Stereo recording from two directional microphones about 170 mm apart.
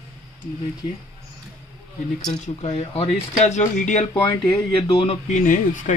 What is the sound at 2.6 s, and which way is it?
Speech, 35° left (ahead or behind).